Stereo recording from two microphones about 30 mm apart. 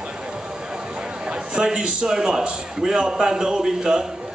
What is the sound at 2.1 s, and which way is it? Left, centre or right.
A man's voice, right.